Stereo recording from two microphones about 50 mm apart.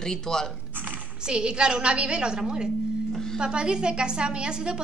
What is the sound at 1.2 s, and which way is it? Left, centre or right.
A woman's voice, centre.